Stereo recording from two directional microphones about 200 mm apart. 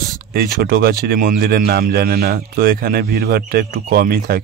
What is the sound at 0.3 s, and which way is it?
Speech, 50° right (ahead or behind).